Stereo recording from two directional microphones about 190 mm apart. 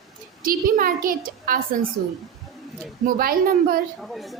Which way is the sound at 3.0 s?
50° right (ahead or behind).